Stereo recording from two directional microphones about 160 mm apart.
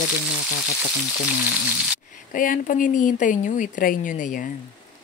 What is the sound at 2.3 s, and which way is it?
Speech, 55° left (ahead or behind).